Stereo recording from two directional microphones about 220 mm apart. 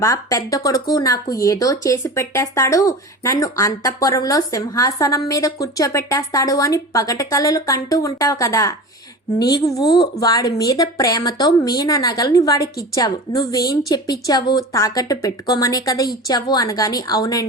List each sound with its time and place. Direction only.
0.0 s speech: 15° left (ahead or behind)